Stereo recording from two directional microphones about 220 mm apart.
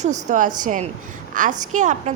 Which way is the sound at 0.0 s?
30° right (ahead or behind).